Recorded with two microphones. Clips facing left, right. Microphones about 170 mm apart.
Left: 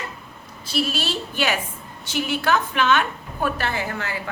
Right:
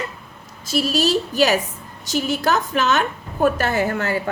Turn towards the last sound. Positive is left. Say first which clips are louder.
# right 7 dB
turn(degrees=-45)  # may be behind; listen again after turning